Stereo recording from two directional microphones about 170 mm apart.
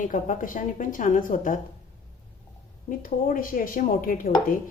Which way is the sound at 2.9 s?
55° left (ahead or behind).